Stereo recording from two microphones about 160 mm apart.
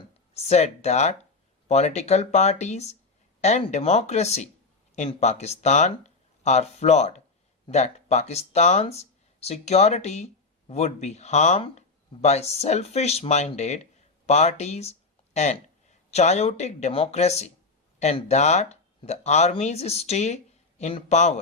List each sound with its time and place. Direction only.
0.3 s speech: 40° left (ahead or behind)